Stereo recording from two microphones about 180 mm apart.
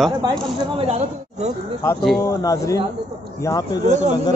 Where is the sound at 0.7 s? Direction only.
35° right (ahead or behind).